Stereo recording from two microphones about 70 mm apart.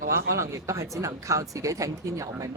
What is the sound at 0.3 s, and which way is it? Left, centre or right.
Speech, right.